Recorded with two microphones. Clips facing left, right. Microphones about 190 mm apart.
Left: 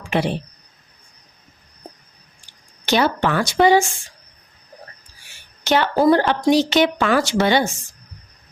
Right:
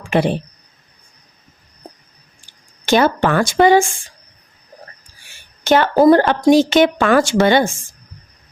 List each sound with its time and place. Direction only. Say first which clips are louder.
0.1 s a woman's voice: right 4 dB; 50° right (ahead or behind)
2.8 s a woman's voice: right 4 dB; 50° right (ahead or behind)
5.6 s a woman's voice: right 5 dB; 50° right (ahead or behind)